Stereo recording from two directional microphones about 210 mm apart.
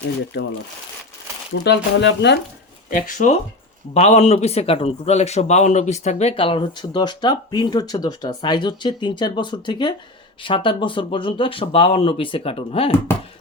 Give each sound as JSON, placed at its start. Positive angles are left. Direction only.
{"t": 0.3, "sound": "speech", "side_deg": 55}
{"t": 1.6, "sound": "speech", "side_deg": 55}
{"t": 2.9, "sound": "a man's voice", "side_deg": 35}